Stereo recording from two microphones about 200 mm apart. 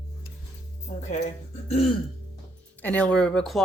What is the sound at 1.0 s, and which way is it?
Speech, 35° left (ahead or behind).